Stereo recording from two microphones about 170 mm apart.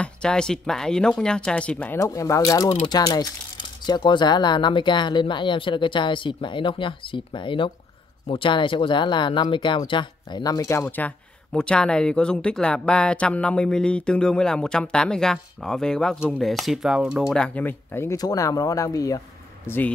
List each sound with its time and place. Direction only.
0.0 s speech: 5° left (ahead or behind)
2.0 s speech: 20° left (ahead or behind)